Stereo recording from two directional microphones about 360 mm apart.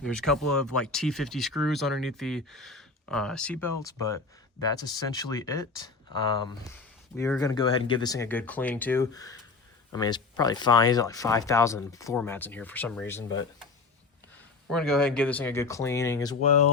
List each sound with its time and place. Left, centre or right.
0.0 s speech: centre
7.2 s speech: centre
14.7 s speech: centre